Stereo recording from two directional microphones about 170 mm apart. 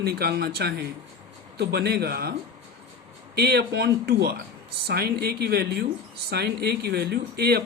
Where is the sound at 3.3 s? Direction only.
70° right (ahead or behind).